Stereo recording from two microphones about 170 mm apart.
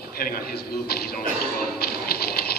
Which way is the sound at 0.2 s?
60° left (ahead or behind).